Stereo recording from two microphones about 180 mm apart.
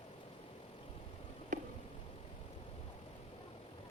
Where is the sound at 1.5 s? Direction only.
45° right (ahead or behind).